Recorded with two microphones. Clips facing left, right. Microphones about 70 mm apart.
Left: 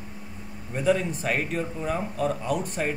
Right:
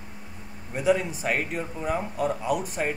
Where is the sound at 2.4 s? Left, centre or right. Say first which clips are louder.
Right 1 dB; centre.